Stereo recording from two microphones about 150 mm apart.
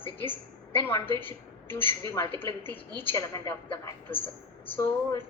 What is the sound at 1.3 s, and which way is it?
A woman's voice, 15° left (ahead or behind).